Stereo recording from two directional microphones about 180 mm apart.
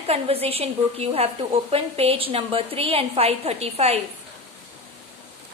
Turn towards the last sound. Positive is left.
turn(degrees=-35)  # may be behind; listen again after turning